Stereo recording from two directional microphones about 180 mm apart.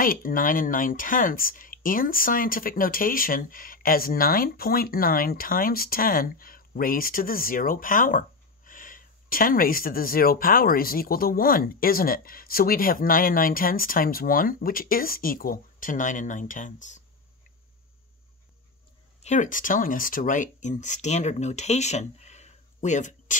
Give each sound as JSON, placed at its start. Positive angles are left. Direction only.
{"t": 0.0, "sound": "speech", "side_deg": 50}
{"t": 19.2, "sound": "speech", "side_deg": 45}